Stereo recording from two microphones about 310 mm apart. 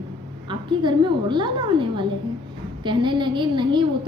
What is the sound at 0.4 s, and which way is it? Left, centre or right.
A woman's voice, centre.